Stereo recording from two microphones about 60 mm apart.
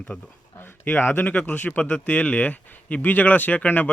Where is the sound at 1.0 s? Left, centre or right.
Left.